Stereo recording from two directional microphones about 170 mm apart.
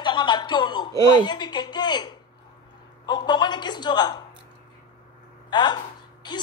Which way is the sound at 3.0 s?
25° left (ahead or behind).